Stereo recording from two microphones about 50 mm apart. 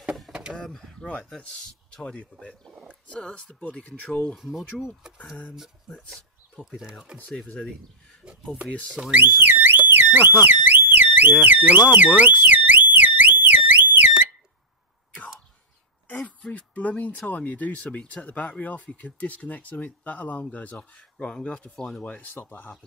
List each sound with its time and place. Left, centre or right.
0.3 s a sound: centre
0.6 s speech: centre
2.7 s a sound: right
3.1 s speech: left
4.4 s speech: centre
6.6 s speech: left
9.1 s a sound: right
10.4 s alarm: right
11.3 s speech: right
12.2 s alarm: right
16.2 s speech: left
20.7 s speech: centre
22.0 s speech: left